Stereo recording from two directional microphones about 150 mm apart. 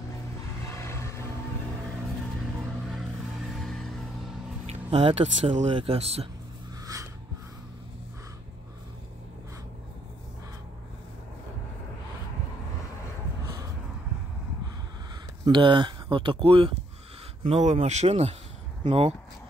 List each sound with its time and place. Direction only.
0.7 s vehicle: 15° left (ahead or behind)
3.5 s music: 5° left (ahead or behind)
4.6 s speech: 40° right (ahead or behind)
15.4 s speech: 35° right (ahead or behind)
17.4 s speech: 50° right (ahead or behind)